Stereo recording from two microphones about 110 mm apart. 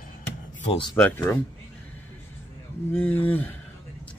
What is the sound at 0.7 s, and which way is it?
Speech, 45° left (ahead or behind).